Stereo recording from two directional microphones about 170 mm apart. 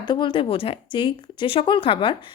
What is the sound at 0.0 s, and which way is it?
Speech, 25° left (ahead or behind).